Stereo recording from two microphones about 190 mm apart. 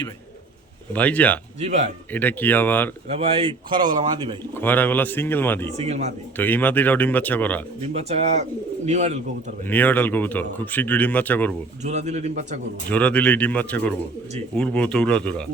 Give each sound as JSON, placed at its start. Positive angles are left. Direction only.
{"t": 0.9, "sound": "speech", "side_deg": 5}
{"t": 1.5, "sound": "a man's voice", "side_deg": -35}
{"t": 2.1, "sound": "speech", "side_deg": 10}
{"t": 3.1, "sound": "speech", "side_deg": -30}
{"t": 4.5, "sound": "speech", "side_deg": 10}
{"t": 5.7, "sound": "a man's voice", "side_deg": -35}
{"t": 6.3, "sound": "speech", "side_deg": 10}
{"t": 7.8, "sound": "a man's voice", "side_deg": -35}
{"t": 9.6, "sound": "speech", "side_deg": 10}
{"t": 11.8, "sound": "a man's voice", "side_deg": -35}
{"t": 12.9, "sound": "speech", "side_deg": 5}